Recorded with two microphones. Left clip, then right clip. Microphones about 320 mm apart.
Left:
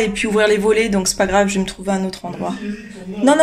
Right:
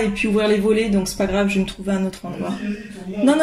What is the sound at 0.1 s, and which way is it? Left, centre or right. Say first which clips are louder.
A man's voice: left 3 dB; left.